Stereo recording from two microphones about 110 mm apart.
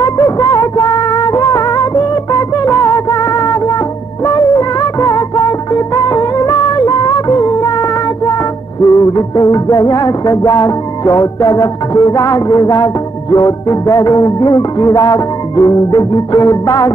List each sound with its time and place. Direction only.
0.0 s music: 35° left (ahead or behind)
8.8 s music: 30° left (ahead or behind)